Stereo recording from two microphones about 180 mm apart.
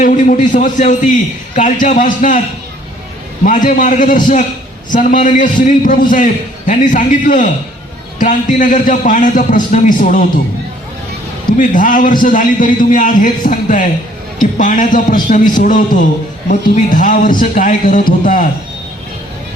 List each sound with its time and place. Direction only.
0.0 s a man's voice: 45° left (ahead or behind)
3.4 s a man's voice: 45° left (ahead or behind)
11.5 s a man's voice: 50° left (ahead or behind)